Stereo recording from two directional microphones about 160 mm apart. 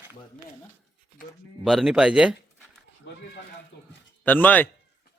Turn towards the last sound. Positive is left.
turn(degrees=10)  # may be behind; listen again after turning